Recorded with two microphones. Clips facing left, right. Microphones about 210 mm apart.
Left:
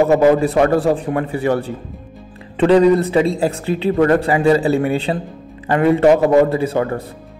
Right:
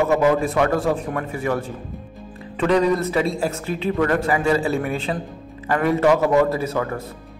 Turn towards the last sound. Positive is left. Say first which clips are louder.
# left 5 dB
turn(degrees=30)  # may be behind; listen again after turning